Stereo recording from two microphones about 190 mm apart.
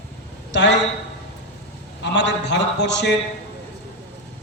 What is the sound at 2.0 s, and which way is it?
A man's voice, 70° left (ahead or behind).